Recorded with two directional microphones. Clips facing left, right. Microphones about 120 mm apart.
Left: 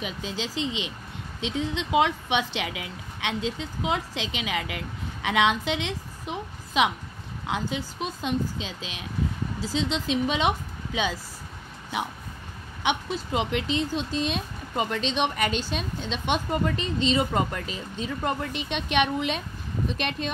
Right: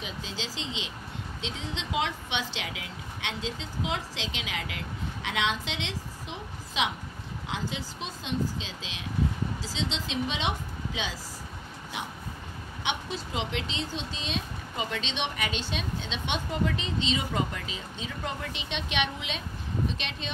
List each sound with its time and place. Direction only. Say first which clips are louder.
0.0 s a woman's voice: left 5 dB; 55° left (ahead or behind)
12.8 s speech: left 6 dB; 55° left (ahead or behind)